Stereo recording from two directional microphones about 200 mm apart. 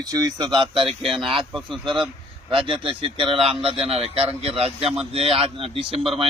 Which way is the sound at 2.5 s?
25° right (ahead or behind).